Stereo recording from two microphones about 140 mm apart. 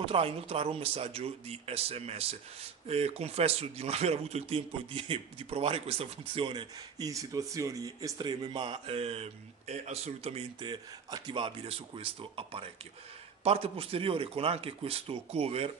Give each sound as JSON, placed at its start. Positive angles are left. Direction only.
{"t": 0.0, "sound": "speech", "side_deg": -40}
{"t": 10.6, "sound": "speech", "side_deg": -30}